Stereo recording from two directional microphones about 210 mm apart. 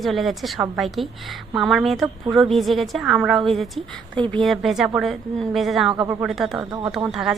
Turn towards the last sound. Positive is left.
turn(degrees=0)  # may be behind; listen again after turning